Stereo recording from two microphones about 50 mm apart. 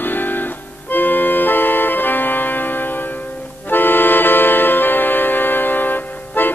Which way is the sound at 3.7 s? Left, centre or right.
Left.